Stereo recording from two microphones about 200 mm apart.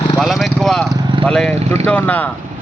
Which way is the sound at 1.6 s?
35° right (ahead or behind).